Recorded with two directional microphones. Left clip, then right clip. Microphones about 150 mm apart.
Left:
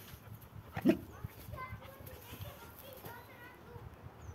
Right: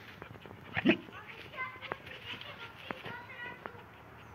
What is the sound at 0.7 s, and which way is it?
Dog, 35° left (ahead or behind).